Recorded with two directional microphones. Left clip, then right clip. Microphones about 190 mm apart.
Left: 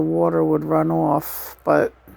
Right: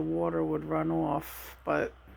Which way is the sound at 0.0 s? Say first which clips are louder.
Left 12 dB; 40° left (ahead or behind).